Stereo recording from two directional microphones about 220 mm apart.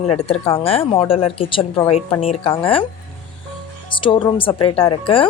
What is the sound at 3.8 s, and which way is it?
A woman's voice, 20° left (ahead or behind).